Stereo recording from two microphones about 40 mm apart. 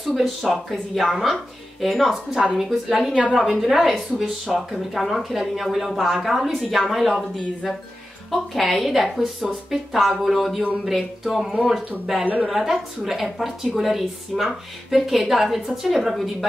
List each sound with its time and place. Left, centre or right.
0.0 s a woman's voice: centre
11.5 s speech: centre
12.4 s a woman's voice: centre